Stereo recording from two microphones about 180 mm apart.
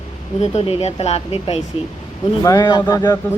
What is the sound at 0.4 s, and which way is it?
Speech, 35° left (ahead or behind).